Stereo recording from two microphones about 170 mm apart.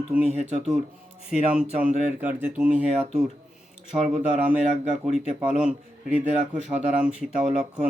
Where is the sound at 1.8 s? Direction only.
45° right (ahead or behind).